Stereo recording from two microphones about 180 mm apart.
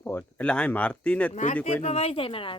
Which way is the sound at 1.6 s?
35° left (ahead or behind).